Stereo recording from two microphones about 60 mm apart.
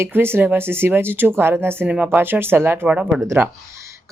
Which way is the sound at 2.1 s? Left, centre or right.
Right.